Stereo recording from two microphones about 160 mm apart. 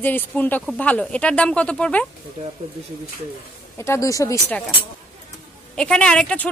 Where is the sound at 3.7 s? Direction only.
15° left (ahead or behind).